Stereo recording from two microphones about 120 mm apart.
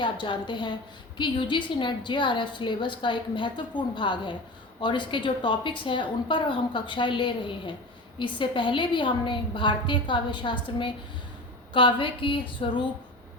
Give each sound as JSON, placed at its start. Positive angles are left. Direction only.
{"t": 0.0, "sound": "a woman's voice", "side_deg": 40}